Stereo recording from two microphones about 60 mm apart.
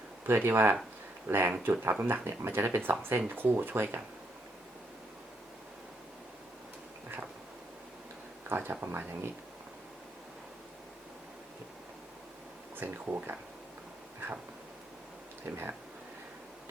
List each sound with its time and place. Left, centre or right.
0.3 s speech: right
8.4 s speech: right
12.7 s speech: right
15.4 s speech: right